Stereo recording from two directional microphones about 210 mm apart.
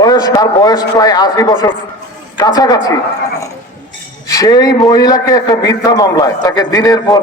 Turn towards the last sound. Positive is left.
turn(degrees=15)  # may be behind; listen again after turning